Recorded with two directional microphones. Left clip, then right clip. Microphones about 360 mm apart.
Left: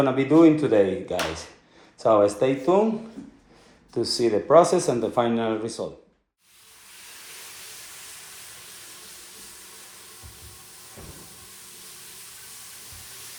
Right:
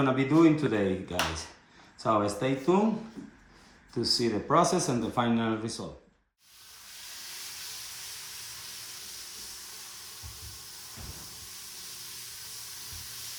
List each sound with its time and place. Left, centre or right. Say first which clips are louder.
0.0 s speech: left 6 dB; centre
4.0 s speech: left 5 dB; centre